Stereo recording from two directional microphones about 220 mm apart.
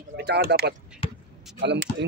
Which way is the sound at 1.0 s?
25° left (ahead or behind).